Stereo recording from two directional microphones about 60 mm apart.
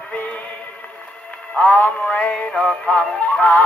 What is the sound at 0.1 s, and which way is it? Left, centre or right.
Music, left.